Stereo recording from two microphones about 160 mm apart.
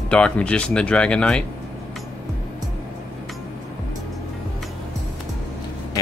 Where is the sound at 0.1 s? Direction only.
5° left (ahead or behind).